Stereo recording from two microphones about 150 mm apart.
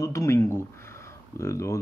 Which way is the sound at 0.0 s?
20° left (ahead or behind).